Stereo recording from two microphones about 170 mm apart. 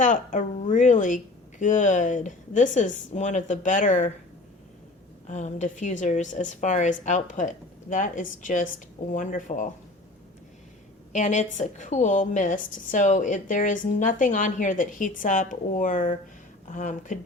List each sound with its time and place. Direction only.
0.0 s a woman's voice: 50° left (ahead or behind)
5.3 s a woman's voice: 45° left (ahead or behind)
11.1 s a woman's voice: 45° left (ahead or behind)